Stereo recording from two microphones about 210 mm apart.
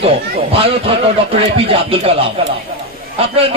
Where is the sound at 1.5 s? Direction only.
25° right (ahead or behind).